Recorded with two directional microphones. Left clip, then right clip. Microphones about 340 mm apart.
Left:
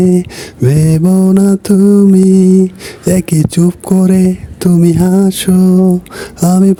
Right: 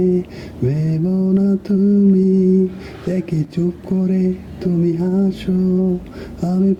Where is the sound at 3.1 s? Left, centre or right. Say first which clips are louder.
Left 10 dB; left.